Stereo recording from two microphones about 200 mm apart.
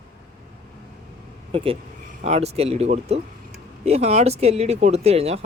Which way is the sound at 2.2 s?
30° right (ahead or behind).